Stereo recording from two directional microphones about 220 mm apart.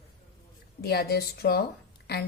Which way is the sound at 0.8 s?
45° left (ahead or behind).